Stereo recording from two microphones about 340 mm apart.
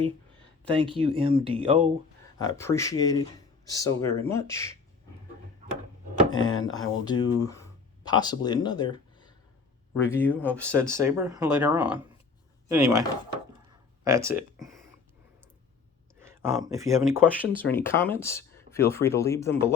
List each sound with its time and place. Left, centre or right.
0.7 s speech: centre
2.4 s speech: centre
6.4 s speech: centre
10.6 s speech: centre
14.0 s speech: centre
16.2 s speech: centre
17.7 s speech: centre